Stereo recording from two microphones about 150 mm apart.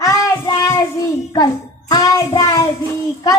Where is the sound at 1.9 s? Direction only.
25° left (ahead or behind).